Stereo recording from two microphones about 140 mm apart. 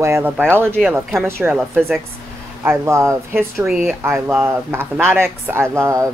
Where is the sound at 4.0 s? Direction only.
15° right (ahead or behind).